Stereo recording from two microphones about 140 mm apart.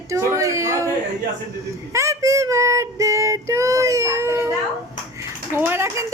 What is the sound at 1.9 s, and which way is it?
Child singing, 20° right (ahead or behind).